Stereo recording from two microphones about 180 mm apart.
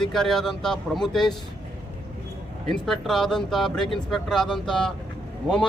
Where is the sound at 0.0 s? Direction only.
Centre (ahead or behind).